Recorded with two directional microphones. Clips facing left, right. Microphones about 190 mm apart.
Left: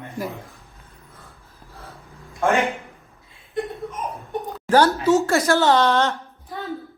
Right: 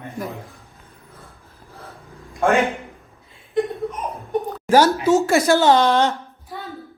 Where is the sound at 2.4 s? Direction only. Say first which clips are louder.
Right 2 dB; 15° right (ahead or behind).